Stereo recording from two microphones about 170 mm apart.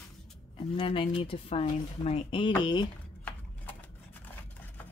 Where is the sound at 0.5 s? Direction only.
30° left (ahead or behind).